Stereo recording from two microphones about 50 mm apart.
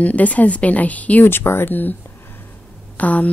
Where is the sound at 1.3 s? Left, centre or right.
Left.